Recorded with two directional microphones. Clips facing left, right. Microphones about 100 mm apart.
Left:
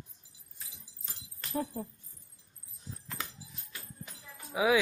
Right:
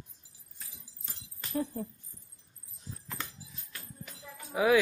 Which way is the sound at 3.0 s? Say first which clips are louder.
Even; centre (ahead or behind).